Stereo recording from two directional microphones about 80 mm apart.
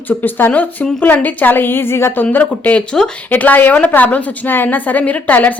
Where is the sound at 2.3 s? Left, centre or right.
Centre.